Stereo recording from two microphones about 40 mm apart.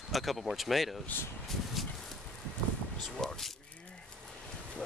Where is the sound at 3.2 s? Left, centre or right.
Centre.